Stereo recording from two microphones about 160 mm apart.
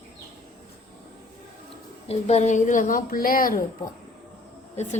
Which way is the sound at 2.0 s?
40° left (ahead or behind).